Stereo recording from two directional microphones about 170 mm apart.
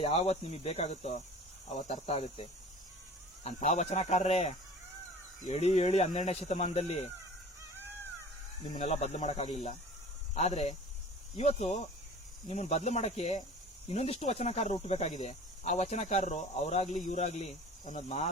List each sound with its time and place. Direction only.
0.0 s speech: 35° left (ahead or behind)
1.7 s cricket: 45° left (ahead or behind)
3.4 s speech: 40° left (ahead or behind)
8.7 s speech: 40° left (ahead or behind)